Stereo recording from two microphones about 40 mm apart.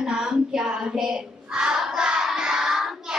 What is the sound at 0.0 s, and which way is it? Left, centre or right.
Child singing, centre.